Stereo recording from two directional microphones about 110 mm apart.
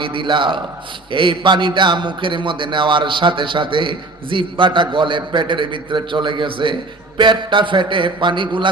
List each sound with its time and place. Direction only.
0.0 s a man's voice: 50° right (ahead or behind)